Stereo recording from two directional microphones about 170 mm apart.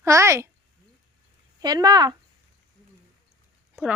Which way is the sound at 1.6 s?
25° right (ahead or behind).